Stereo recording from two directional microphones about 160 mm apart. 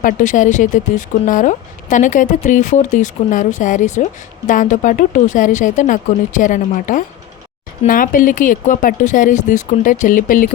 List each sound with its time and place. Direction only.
0.0 s speech: 55° left (ahead or behind)